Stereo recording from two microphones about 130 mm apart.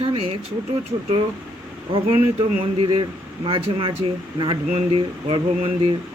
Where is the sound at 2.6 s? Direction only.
45° right (ahead or behind).